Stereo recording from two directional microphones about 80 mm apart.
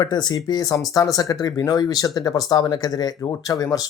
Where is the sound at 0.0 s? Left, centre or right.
Left.